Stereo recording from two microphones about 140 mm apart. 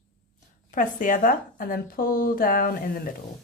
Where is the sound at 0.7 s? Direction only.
70° left (ahead or behind); by 3.1 s 90° left.